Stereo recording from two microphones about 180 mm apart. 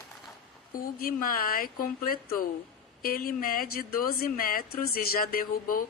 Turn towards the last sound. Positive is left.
turn(degrees=50)  # may be behind; listen again after turning